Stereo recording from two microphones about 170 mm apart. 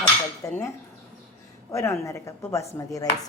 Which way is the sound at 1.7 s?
15° left (ahead or behind).